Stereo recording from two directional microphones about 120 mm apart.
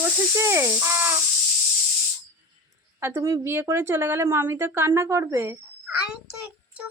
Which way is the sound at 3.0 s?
20° right (ahead or behind).